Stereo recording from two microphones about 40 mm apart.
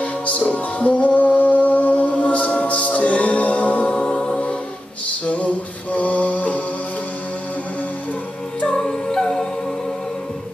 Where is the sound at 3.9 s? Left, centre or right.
Centre.